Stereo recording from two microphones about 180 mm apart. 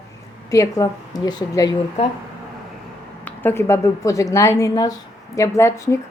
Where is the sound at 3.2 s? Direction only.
10° left (ahead or behind).